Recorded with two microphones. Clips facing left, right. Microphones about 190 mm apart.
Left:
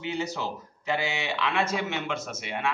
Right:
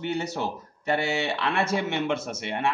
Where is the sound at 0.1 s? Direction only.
65° right (ahead or behind).